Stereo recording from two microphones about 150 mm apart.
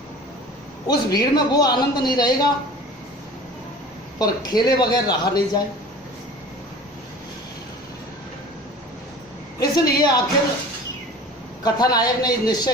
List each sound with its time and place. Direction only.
0.9 s a man's voice: 25° left (ahead or behind)
4.2 s a man's voice: 25° left (ahead or behind)
9.6 s a man's voice: 25° left (ahead or behind)
11.6 s a man's voice: 25° left (ahead or behind)